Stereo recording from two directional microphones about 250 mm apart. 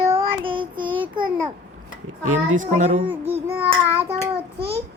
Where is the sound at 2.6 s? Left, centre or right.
Right.